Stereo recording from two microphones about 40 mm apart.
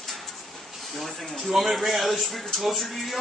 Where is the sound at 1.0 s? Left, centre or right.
Centre.